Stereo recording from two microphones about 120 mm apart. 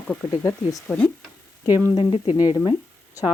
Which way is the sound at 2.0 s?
45° left (ahead or behind).